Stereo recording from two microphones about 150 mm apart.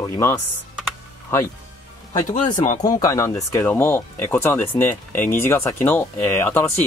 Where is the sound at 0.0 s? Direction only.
20° left (ahead or behind).